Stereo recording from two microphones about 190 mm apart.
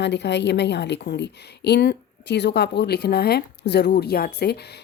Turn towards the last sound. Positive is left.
turn(degrees=55)  # may be behind; listen again after turning